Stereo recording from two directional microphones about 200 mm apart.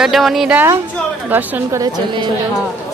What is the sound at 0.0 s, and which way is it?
A woman's voice, centre (ahead or behind).